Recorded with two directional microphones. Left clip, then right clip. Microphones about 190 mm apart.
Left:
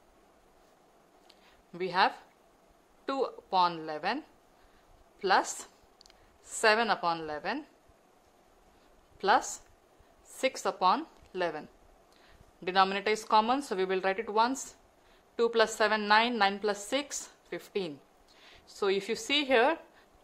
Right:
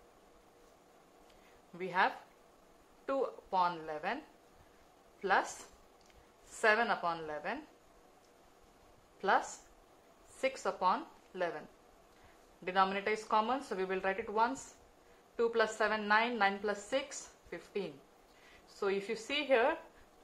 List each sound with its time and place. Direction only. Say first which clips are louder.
1.7 s a woman's voice: left 5 dB; 45° left (ahead or behind)
5.2 s a woman's voice: left 5 dB; 45° left (ahead or behind)
6.6 s a woman's voice: left 4 dB; 45° left (ahead or behind)
10.4 s a woman's voice: left 5 dB; 45° left (ahead or behind)
12.6 s a woman's voice: left 5 dB; 50° left (ahead or behind)